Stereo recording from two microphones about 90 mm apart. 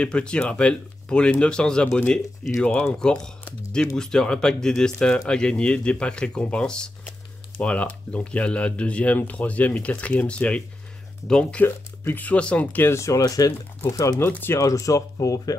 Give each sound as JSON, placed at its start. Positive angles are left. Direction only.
{"t": 0.0, "sound": "speech", "side_deg": 10}
{"t": 11.6, "sound": "speech", "side_deg": 25}
{"t": 14.2, "sound": "speech", "side_deg": 25}
{"t": 14.6, "sound": "speech", "side_deg": 40}